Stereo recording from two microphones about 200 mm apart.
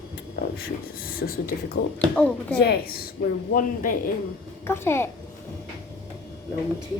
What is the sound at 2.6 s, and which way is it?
Child singing, 50° left (ahead or behind).